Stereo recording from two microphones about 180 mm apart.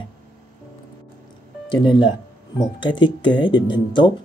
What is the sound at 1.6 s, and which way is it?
Speech, 25° left (ahead or behind).